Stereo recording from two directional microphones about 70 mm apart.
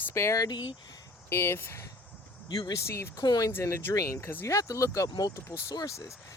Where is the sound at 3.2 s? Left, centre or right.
Left.